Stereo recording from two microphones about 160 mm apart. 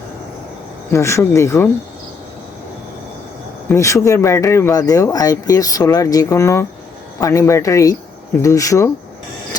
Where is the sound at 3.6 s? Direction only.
20° left (ahead or behind).